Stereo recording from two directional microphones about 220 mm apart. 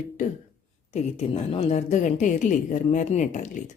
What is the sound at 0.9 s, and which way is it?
Speech, 25° left (ahead or behind).